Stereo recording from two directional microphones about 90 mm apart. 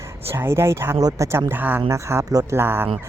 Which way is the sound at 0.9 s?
40° right (ahead or behind).